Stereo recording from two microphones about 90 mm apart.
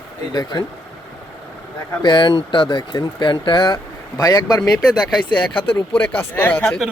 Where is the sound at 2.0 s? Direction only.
55° left (ahead or behind).